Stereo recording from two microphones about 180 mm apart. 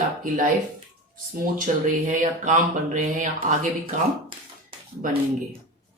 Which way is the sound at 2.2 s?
45° right (ahead or behind).